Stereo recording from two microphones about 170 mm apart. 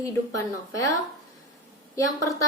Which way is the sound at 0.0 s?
20° left (ahead or behind).